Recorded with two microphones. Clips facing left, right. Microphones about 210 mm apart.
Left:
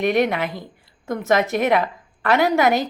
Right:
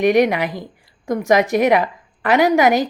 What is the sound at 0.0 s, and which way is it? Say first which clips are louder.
Speech: right 4 dB; 15° right (ahead or behind).